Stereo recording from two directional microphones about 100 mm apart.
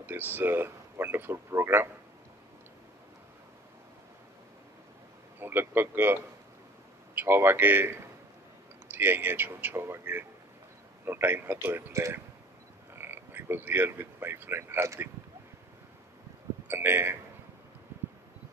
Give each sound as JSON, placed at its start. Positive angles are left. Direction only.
{"t": 0.0, "sound": "speech", "side_deg": -20}
{"t": 5.4, "sound": "speech", "side_deg": -20}
{"t": 7.2, "sound": "speech", "side_deg": -20}
{"t": 16.6, "sound": "speech", "side_deg": -20}